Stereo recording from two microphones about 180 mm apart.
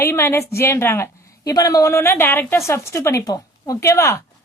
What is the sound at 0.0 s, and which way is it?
A woman's voice, 15° left (ahead or behind).